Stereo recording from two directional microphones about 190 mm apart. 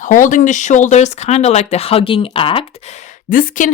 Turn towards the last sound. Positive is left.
turn(degrees=45)  # may be behind; listen again after turning